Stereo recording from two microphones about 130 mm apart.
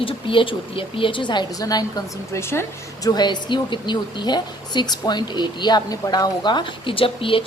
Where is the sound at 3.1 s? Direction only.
35° left (ahead or behind).